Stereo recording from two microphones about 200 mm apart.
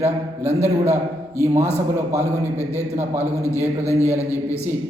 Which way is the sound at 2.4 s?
15° left (ahead or behind).